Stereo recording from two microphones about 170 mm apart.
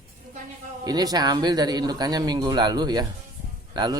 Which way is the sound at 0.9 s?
20° right (ahead or behind).